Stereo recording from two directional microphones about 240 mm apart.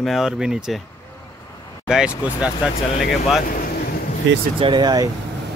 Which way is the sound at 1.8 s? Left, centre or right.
Centre.